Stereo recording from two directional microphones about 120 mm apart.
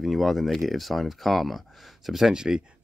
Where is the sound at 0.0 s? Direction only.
Centre (ahead or behind).